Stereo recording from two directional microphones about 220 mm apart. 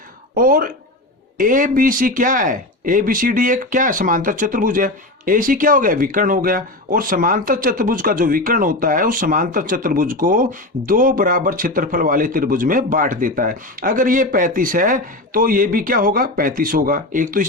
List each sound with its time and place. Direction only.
0.3 s speech: 40° right (ahead or behind)